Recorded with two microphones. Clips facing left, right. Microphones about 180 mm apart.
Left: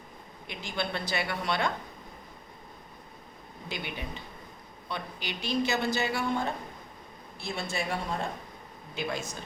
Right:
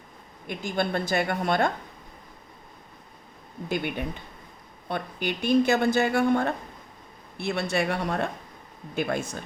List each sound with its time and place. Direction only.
0.4 s speech: 50° right (ahead or behind)
3.7 s speech: 55° right (ahead or behind)
9.0 s speech: 55° right (ahead or behind)